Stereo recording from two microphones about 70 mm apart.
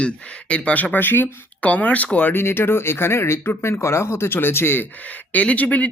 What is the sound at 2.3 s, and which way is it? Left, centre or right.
Speech, left.